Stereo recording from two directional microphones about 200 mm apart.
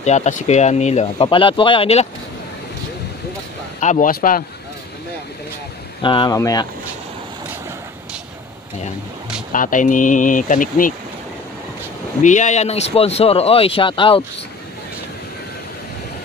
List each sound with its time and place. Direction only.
0.0 s speech: 35° left (ahead or behind)
3.8 s speech: 40° left (ahead or behind)
6.0 s speech: 20° left (ahead or behind)
9.5 s speech: 40° left (ahead or behind)
12.2 s speech: 35° left (ahead or behind)